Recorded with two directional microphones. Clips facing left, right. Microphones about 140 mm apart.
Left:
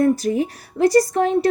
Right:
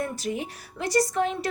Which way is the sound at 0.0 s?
40° left (ahead or behind).